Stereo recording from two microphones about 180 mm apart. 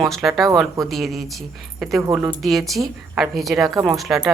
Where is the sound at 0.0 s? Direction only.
Centre (ahead or behind).